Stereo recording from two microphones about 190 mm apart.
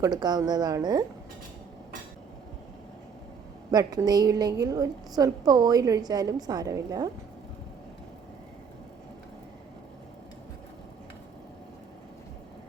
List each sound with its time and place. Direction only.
0.0 s a woman's voice: 20° right (ahead or behind)
3.7 s a woman's voice: 20° right (ahead or behind)